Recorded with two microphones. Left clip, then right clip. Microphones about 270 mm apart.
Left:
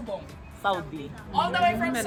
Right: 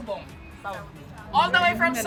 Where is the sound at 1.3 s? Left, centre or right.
Centre.